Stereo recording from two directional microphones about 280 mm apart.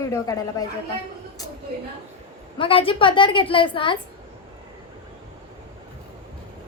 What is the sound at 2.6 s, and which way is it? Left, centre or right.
A woman's voice, centre.